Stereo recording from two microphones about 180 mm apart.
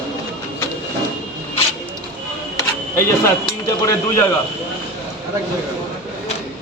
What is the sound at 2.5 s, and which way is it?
Camera, 15° left (ahead or behind).